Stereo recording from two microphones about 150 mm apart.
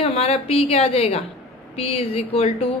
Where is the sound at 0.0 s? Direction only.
45° left (ahead or behind).